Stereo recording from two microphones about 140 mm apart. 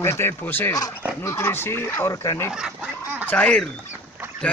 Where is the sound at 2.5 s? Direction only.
5° right (ahead or behind).